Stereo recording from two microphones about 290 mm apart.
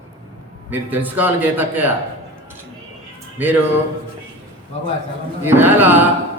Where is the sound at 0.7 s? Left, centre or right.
Centre.